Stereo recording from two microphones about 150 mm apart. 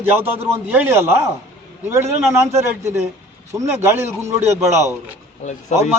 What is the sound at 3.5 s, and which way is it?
Speech, 15° right (ahead or behind).